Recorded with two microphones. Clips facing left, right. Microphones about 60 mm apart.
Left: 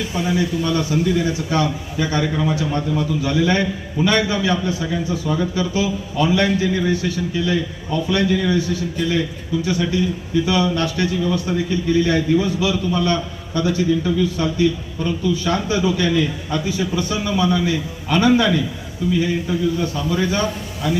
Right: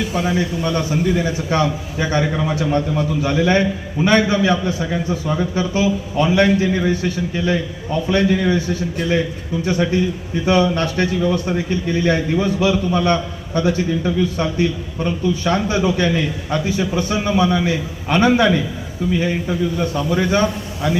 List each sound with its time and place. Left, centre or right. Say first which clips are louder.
0.6 s a man's voice: even; right